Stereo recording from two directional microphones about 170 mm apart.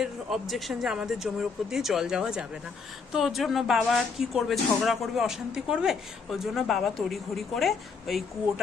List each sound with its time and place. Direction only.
0.0 s speech: centre (ahead or behind)